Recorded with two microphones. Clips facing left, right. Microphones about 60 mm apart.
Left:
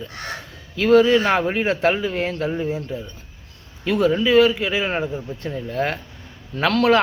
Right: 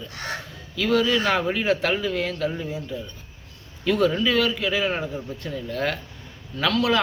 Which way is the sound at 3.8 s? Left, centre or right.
Centre.